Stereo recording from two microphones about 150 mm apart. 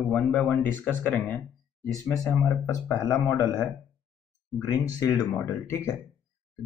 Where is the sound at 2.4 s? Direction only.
20° left (ahead or behind).